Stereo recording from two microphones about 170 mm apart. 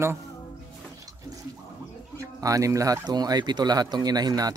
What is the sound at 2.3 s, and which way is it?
Speech, 20° right (ahead or behind).